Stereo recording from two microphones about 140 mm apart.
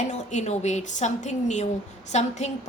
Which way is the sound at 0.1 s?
55° left (ahead or behind).